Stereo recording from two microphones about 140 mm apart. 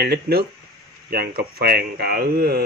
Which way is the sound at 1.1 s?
90° right.